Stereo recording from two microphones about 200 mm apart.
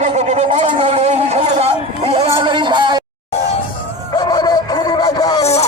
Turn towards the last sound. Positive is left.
turn(degrees=20)  # may be behind; listen again after turning